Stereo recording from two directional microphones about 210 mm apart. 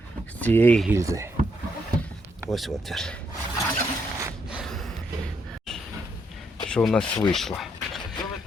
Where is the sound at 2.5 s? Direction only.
Centre (ahead or behind).